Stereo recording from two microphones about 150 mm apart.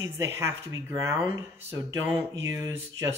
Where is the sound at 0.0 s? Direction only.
15° right (ahead or behind).